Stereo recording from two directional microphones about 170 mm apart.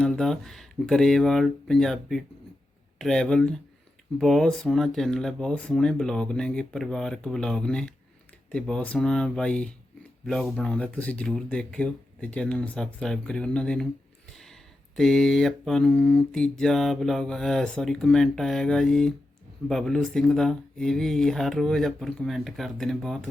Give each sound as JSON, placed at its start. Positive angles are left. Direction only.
{"t": 0.0, "sound": "mantra", "side_deg": 0}